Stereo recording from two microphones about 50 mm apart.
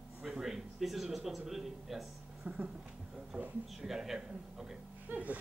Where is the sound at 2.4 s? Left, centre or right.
Right.